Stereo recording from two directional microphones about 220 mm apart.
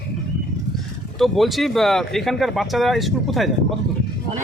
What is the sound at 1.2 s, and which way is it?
Speech, centre (ahead or behind).